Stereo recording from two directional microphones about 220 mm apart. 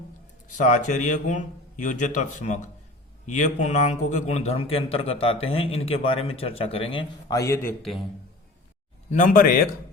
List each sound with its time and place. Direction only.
0.5 s a man's voice: 35° left (ahead or behind); by 7.9 s 10° left (ahead or behind)
9.0 s a man's voice: 35° left (ahead or behind)